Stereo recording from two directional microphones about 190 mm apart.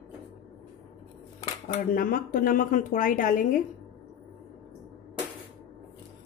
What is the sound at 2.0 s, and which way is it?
Speech, 50° left (ahead or behind).